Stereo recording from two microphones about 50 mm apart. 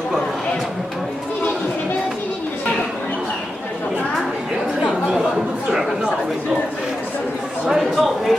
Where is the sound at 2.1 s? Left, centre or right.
Left.